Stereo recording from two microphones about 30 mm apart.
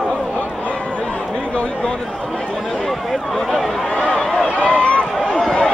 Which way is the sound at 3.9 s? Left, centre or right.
Left.